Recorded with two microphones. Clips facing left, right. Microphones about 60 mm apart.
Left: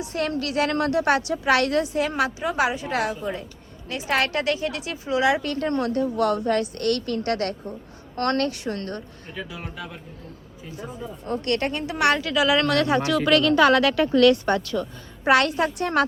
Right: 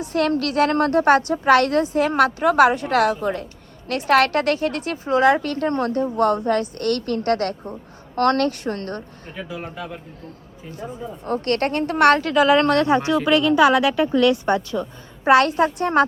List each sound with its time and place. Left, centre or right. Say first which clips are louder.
0.0 s a woman's voice: right 6 dB; right
9.5 s speech: right 4 dB; centre
11.3 s a woman's voice: right 3 dB; right